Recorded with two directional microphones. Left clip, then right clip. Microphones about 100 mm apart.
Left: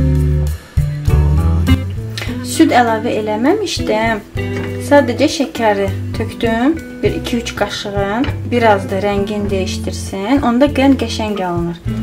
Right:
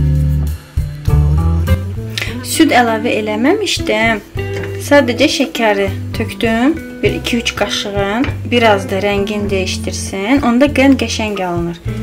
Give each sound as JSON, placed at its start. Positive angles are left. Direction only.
{"t": 1.0, "sound": "music", "side_deg": 0}
{"t": 2.6, "sound": "speech", "side_deg": -5}